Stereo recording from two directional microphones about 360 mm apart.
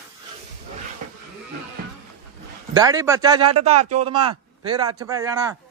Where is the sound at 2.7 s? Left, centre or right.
Centre.